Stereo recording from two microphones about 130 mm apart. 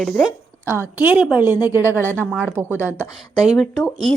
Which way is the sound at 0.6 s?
20° right (ahead or behind).